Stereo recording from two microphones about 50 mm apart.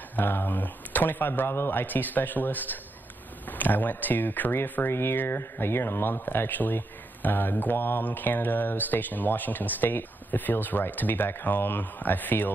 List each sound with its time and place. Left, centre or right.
0.1 s speech: left
4.8 s speech: left